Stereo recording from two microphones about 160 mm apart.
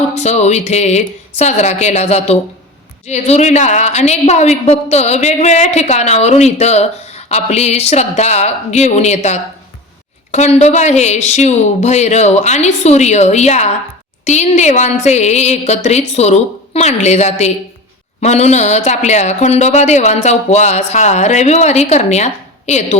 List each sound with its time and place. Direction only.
0.1 s a woman's voice: 45° left (ahead or behind)